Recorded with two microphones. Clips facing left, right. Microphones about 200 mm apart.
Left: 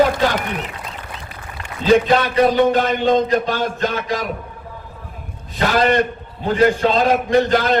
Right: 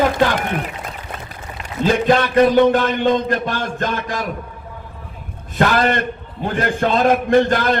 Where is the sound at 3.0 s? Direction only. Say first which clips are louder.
Left 2 dB; 50° right (ahead or behind).